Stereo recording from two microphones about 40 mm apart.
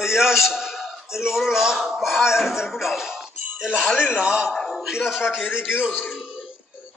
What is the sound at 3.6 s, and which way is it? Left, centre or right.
A man's voice, right.